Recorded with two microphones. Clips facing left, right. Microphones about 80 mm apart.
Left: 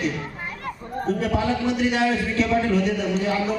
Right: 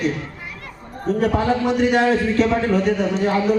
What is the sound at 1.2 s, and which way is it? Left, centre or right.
A man's voice, right.